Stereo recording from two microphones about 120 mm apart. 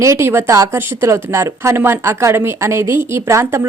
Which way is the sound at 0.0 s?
25° right (ahead or behind).